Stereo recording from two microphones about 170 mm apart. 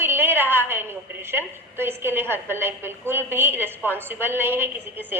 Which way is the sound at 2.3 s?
15° right (ahead or behind).